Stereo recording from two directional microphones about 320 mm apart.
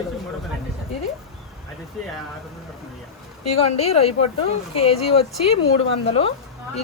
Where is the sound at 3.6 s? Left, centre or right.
Centre.